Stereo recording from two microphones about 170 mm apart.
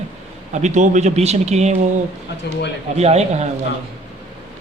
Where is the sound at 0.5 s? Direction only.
45° right (ahead or behind).